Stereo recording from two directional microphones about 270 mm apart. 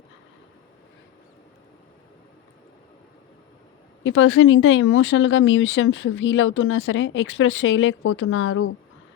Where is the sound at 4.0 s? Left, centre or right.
Left.